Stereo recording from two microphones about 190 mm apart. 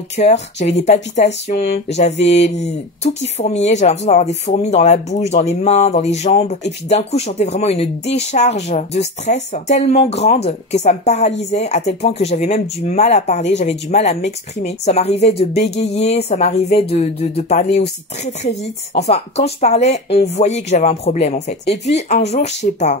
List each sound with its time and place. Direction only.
0.2 s speech: 35° left (ahead or behind)